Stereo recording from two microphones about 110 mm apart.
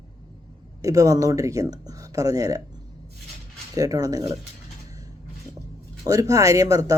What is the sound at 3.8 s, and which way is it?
Speech, 35° right (ahead or behind).